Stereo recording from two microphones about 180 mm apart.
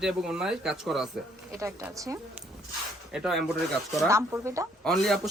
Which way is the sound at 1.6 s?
15° right (ahead or behind).